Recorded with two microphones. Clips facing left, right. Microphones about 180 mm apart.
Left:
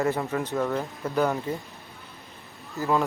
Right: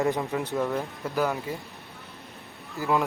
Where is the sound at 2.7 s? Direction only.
15° right (ahead or behind).